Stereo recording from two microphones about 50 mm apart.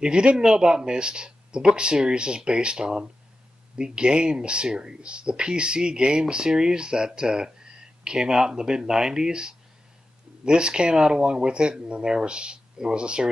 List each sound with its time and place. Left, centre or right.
0.0 s speech: centre